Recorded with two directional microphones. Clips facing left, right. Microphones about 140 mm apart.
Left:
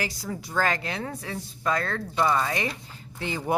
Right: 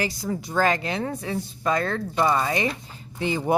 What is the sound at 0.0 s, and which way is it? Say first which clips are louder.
Speech: right 5 dB; 25° right (ahead or behind).